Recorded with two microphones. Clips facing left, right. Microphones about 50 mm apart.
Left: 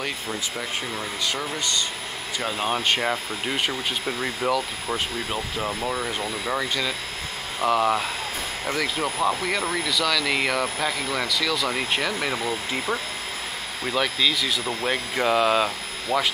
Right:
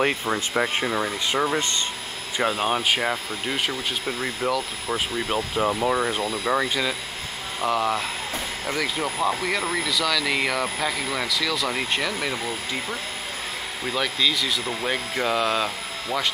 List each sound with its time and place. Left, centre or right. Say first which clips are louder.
0.0 s speech: right 6 dB; right
2.5 s speech: right 1 dB; centre
5.3 s speech: right 4 dB; centre
6.2 s speech: right 3 dB; centre
6.5 s speech: right 3 dB; centre
7.6 s speech: left 2 dB; centre
13.8 s speech: left 1 dB; centre